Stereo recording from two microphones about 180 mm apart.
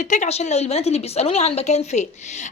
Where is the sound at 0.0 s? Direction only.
40° left (ahead or behind).